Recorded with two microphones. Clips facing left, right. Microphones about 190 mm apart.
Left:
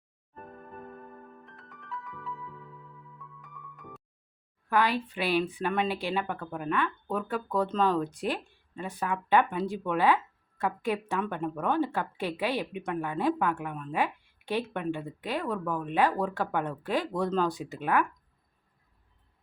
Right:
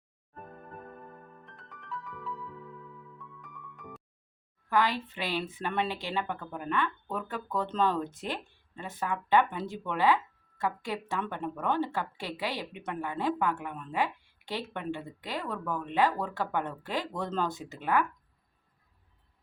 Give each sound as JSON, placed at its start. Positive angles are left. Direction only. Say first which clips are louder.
{"t": 1.5, "sound": "music", "louder": "right 3 dB", "side_deg": 0}
{"t": 4.7, "sound": "speech", "louder": "left 2 dB", "side_deg": 15}
{"t": 8.0, "sound": "speech", "louder": "left 5 dB", "side_deg": -20}
{"t": 9.0, "sound": "speech", "louder": "left 1 dB", "side_deg": 15}